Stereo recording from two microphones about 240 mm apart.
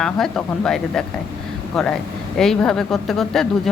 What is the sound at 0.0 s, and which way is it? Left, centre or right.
Speech, centre.